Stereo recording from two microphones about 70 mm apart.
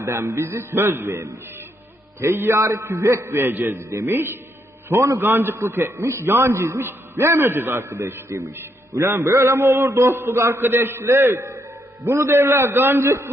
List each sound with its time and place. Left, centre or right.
0.0 s a man's voice: right